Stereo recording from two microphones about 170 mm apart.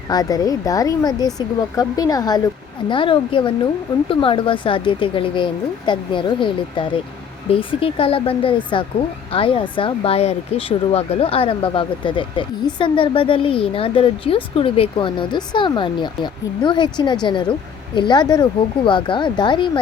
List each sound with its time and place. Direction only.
0.1 s speech: 20° left (ahead or behind)